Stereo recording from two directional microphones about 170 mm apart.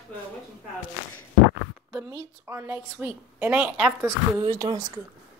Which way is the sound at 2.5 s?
15° right (ahead or behind).